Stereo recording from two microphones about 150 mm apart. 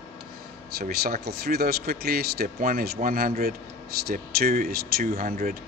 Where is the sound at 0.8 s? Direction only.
90° right.